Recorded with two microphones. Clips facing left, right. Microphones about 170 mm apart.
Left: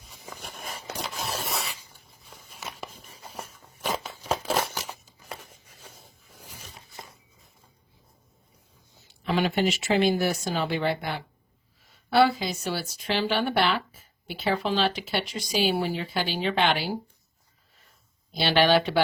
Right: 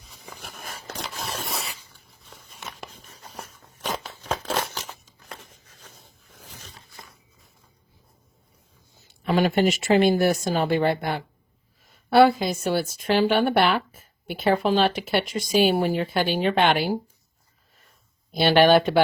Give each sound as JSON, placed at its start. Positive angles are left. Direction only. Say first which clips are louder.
{"t": 0.3, "sound": "a sound", "louder": "left 1 dB", "side_deg": 0}
{"t": 9.2, "sound": "speech", "louder": "right 4 dB", "side_deg": -45}
{"t": 18.3, "sound": "speech", "louder": "right 5 dB", "side_deg": -50}